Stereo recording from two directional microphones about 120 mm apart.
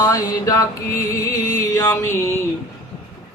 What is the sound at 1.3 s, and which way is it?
Music, 30° left (ahead or behind).